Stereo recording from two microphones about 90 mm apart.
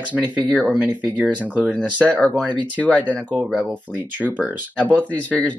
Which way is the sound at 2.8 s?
15° left (ahead or behind).